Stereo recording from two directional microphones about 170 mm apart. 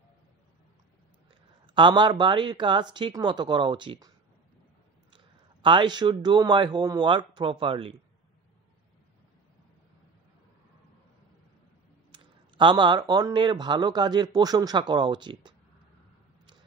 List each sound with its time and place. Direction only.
1.7 s a man's voice: 25° right (ahead or behind)
5.1 s speech: 30° right (ahead or behind)
12.1 s a man's voice: 30° right (ahead or behind)